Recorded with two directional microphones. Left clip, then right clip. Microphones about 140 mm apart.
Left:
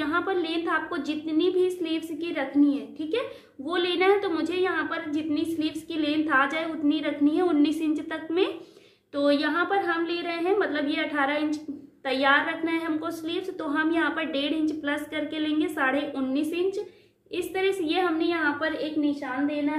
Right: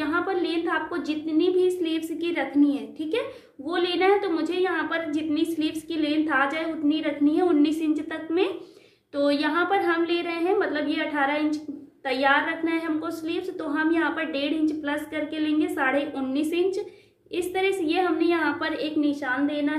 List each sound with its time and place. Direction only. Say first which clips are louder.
0.0 s a woman's voice: right 1 dB; 5° left (ahead or behind)
18.6 s a woman's voice: right 1 dB; 10° right (ahead or behind)